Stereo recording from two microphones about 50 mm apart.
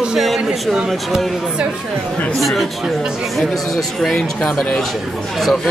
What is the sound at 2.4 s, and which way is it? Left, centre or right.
Speech, centre.